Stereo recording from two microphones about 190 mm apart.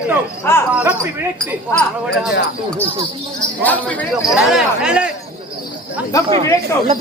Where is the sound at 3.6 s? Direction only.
10° left (ahead or behind).